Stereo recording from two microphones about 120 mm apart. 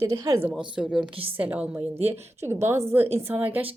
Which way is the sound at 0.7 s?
5° right (ahead or behind).